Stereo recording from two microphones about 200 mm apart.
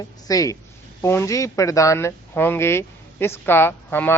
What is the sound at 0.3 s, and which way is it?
Speech, 15° left (ahead or behind).